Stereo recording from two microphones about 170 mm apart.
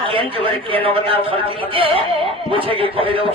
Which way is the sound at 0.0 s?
30° right (ahead or behind).